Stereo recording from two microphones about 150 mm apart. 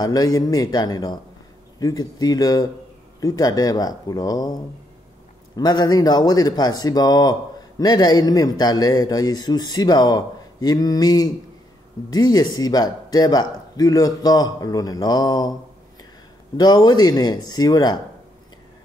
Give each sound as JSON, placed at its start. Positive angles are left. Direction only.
{"t": 0.0, "sound": "speech", "side_deg": 25}
{"t": 5.6, "sound": "speech", "side_deg": 25}
{"t": 16.5, "sound": "speech", "side_deg": 25}